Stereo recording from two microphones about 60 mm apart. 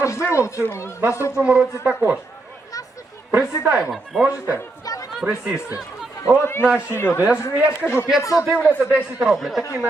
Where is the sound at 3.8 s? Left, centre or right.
Centre.